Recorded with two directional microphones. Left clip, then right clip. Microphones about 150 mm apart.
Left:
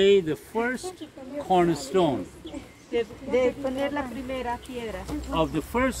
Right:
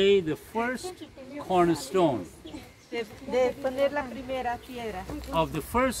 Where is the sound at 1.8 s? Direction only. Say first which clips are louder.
Left 1 dB; 60° right (ahead or behind).